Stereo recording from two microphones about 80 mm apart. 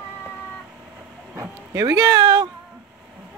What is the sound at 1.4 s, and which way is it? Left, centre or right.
Speech, right.